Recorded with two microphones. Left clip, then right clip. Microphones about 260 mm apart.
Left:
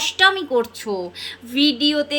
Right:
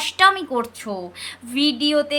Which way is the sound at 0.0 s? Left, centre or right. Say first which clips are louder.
Even; centre.